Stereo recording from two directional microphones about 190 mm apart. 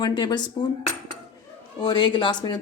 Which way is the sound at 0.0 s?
20° left (ahead or behind).